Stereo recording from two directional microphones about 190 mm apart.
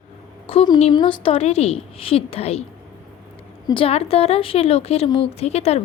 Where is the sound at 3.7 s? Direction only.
30° left (ahead or behind).